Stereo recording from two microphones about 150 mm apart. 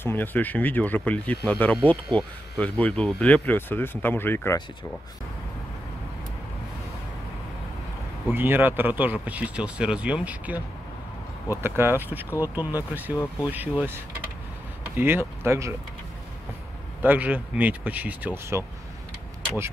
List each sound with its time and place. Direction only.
0.0 s speech: 15° left (ahead or behind)
8.3 s speech: 15° right (ahead or behind)
13.1 s speech: 25° left (ahead or behind)
13.5 s speech: 10° right (ahead or behind)
15.0 s speech: 15° right (ahead or behind)
17.0 s speech: 10° right (ahead or behind)